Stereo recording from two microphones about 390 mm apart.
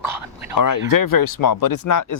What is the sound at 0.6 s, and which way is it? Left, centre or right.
Speech, left.